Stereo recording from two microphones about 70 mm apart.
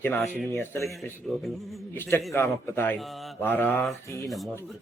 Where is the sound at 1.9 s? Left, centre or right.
Left.